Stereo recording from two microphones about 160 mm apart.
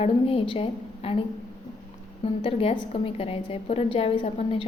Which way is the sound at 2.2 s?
35° left (ahead or behind).